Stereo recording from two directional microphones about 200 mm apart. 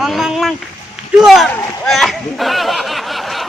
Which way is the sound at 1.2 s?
Centre (ahead or behind).